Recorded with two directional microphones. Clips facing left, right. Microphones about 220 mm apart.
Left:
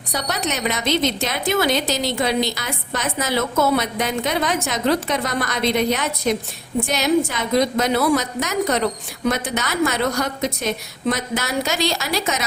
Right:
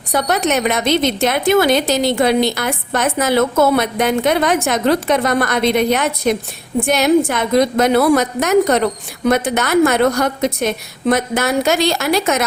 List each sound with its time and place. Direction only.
0.1 s a woman's voice: 55° right (ahead or behind)